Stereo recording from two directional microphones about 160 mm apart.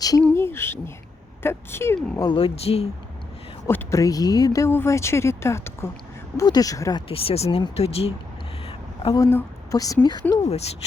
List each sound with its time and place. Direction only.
0.2 s a sound: 15° left (ahead or behind)
1.4 s speech: 15° left (ahead or behind)
2.1 s speech: 30° left (ahead or behind)
3.7 s a woman's voice: 20° left (ahead or behind)
7.1 s speech: 40° left (ahead or behind)
9.1 s a woman's voice: 20° left (ahead or behind)
10.4 s speech: 40° left (ahead or behind)